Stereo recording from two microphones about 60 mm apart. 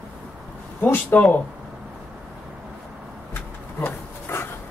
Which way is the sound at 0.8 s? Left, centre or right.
Left.